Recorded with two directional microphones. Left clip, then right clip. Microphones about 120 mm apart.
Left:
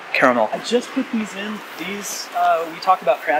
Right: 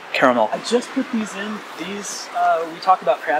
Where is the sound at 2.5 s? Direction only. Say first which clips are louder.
Right 1 dB; centre (ahead or behind).